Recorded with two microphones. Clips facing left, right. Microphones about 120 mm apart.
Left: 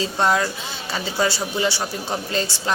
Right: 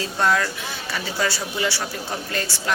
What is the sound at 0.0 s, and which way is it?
Speech, 20° left (ahead or behind).